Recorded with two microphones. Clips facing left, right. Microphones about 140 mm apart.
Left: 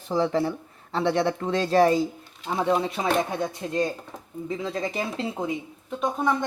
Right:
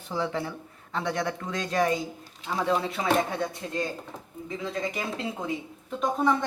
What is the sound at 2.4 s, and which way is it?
Speech, 20° left (ahead or behind).